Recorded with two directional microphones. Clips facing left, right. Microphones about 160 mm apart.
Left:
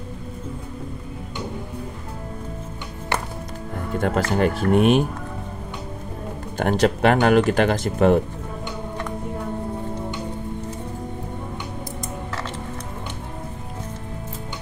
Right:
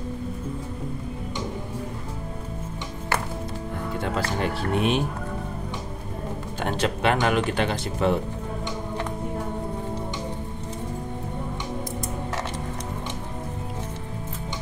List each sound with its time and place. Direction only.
4.0 s speech: 50° left (ahead or behind)
6.6 s speech: 45° left (ahead or behind)